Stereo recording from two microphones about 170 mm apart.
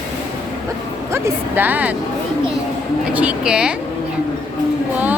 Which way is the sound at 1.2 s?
10° right (ahead or behind).